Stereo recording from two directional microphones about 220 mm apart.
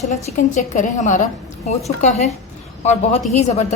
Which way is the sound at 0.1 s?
30° left (ahead or behind).